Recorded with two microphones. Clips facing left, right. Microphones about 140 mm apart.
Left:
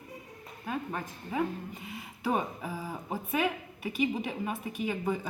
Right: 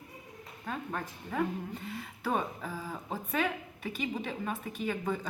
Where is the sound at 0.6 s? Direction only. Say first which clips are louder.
Left 2 dB; 5° left (ahead or behind).